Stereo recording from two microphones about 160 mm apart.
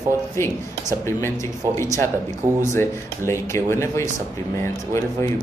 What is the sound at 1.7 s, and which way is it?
Speech, 20° left (ahead or behind).